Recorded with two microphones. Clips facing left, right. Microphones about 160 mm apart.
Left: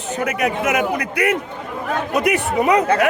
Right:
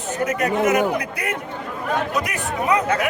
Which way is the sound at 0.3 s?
75° left (ahead or behind).